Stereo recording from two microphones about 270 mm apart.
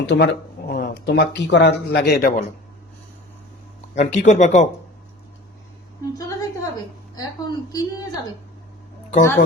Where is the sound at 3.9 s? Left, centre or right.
Left.